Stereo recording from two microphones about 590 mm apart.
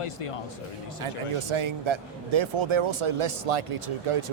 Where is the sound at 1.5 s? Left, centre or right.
Right.